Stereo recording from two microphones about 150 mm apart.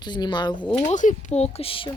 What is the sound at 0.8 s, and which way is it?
Speech, 55° left (ahead or behind).